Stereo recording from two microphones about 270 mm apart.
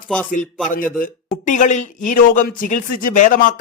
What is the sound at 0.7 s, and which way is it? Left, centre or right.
Speech, left.